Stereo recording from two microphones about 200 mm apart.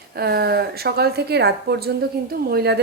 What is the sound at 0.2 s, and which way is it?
A woman's voice, 55° right (ahead or behind).